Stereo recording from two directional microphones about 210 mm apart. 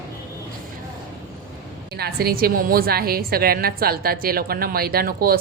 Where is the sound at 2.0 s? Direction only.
45° right (ahead or behind).